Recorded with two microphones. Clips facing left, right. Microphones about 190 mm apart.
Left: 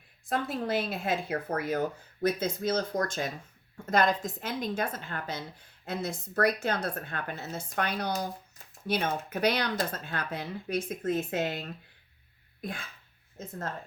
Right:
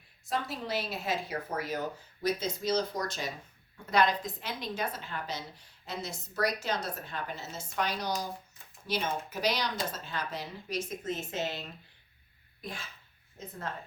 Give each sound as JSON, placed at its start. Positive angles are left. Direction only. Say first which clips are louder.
{"t": 0.3, "sound": "a woman's voice", "louder": "left 4 dB", "side_deg": 50}